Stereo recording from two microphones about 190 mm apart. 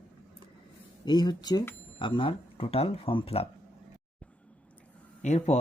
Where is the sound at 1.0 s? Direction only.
25° left (ahead or behind).